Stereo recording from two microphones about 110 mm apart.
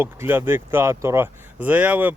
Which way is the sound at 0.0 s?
20° right (ahead or behind).